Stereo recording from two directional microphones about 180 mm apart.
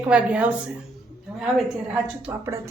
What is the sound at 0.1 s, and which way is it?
Speech, 5° right (ahead or behind).